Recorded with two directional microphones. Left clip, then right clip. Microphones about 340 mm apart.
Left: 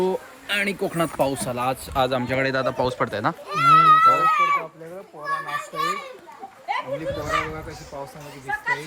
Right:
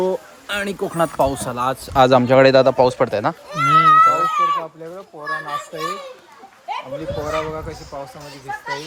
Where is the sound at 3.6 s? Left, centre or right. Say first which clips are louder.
Right 1 dB; right.